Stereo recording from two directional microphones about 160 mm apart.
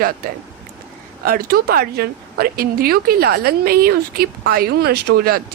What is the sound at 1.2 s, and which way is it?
Speech, 70° right (ahead or behind).